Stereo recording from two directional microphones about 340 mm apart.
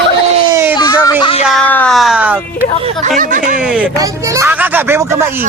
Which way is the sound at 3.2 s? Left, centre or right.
Right.